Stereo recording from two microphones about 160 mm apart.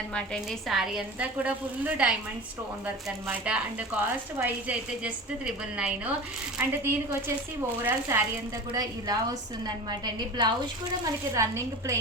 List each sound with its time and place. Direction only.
0.1 s a woman's voice: centre (ahead or behind)
6.6 s a woman's voice: 15° right (ahead or behind)